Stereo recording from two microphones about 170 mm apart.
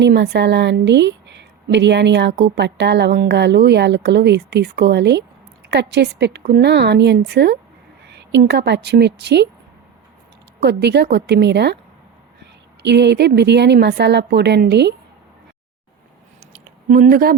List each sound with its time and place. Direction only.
0.0 s a woman's voice: 85° right
6.4 s speech: 70° right (ahead or behind)
8.0 s a woman's voice: 90° right
10.6 s a woman's voice: 80° right
12.8 s a woman's voice: 90° right
16.5 s a sound: 55° right (ahead or behind)